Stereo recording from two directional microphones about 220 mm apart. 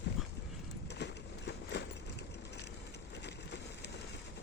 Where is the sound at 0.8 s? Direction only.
50° left (ahead or behind).